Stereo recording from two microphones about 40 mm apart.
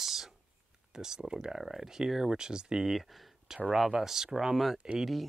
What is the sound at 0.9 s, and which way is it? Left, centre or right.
Speech, centre.